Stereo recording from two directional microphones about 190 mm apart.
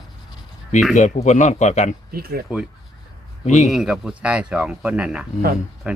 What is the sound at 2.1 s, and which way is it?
Speech, 55° right (ahead or behind).